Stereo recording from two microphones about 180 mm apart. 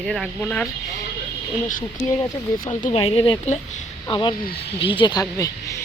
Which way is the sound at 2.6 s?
45° left (ahead or behind).